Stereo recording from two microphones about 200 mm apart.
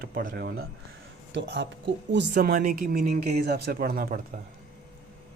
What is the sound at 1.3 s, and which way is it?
A man's voice, 60° right (ahead or behind).